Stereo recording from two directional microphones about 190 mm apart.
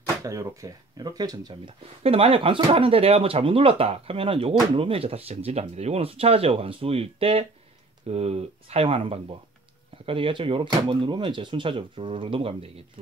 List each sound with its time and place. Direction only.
0.2 s speech: 15° right (ahead or behind)